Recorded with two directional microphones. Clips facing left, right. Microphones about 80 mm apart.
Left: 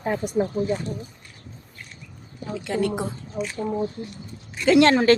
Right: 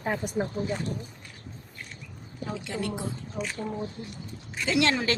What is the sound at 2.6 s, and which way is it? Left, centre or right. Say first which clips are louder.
Speech: left 10 dB; left.